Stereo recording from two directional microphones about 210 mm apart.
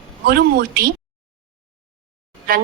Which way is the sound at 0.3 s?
45° right (ahead or behind).